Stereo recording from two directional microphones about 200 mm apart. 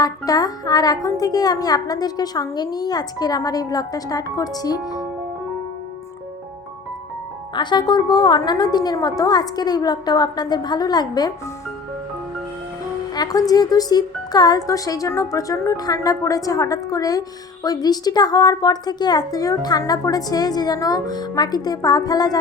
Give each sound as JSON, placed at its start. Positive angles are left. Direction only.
{"t": 0.0, "sound": "speech", "side_deg": 20}
{"t": 7.5, "sound": "speech", "side_deg": 20}
{"t": 13.1, "sound": "speech", "side_deg": 20}